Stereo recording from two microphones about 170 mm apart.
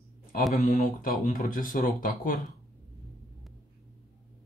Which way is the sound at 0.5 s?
50° left (ahead or behind).